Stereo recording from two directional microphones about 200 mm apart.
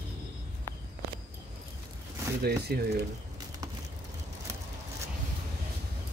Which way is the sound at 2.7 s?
50° right (ahead or behind).